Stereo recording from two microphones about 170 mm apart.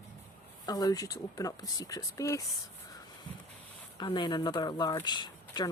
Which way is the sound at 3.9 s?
25° left (ahead or behind).